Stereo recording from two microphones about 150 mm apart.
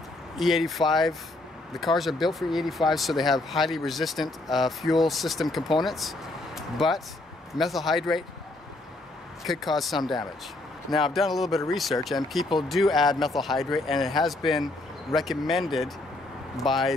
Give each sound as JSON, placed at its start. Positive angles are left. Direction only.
{"t": 0.4, "sound": "speech", "side_deg": 0}
{"t": 9.4, "sound": "speech", "side_deg": 0}